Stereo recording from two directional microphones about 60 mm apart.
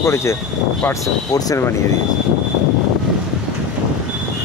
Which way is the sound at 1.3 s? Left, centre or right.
Left.